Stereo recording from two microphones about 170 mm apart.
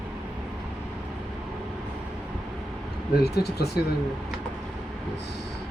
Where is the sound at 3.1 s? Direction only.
70° left (ahead or behind).